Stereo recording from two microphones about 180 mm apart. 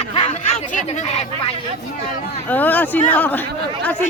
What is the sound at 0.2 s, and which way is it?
Chatter, 40° left (ahead or behind).